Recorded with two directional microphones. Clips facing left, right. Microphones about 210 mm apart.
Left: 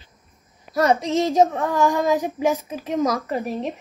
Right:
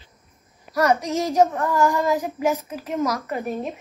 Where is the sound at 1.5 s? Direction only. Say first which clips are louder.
Left 1 dB; 15° left (ahead or behind).